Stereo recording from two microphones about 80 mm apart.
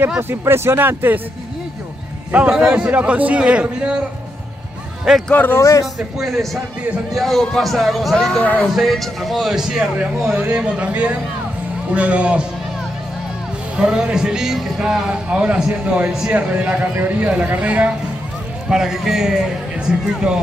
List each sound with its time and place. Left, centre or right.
0.2 s speech: right
2.3 s a man's voice: centre
5.3 s speech: left
5.6 s a man's voice: left
5.9 s speech: centre
8.4 s speech: centre
8.7 s a man's voice: centre
13.7 s a man's voice: centre